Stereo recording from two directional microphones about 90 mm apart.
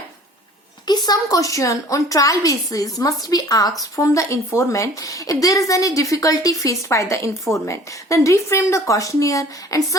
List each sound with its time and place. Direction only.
0.9 s speech: 45° left (ahead or behind)